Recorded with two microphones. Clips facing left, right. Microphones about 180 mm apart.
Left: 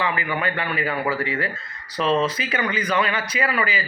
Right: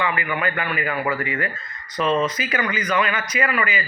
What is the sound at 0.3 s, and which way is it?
A man's voice, 30° left (ahead or behind).